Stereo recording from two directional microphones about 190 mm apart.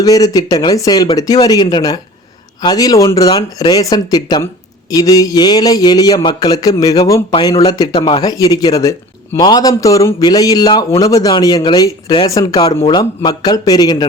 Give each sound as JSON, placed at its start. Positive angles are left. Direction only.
{"t": 0.0, "sound": "a man's voice", "side_deg": 20}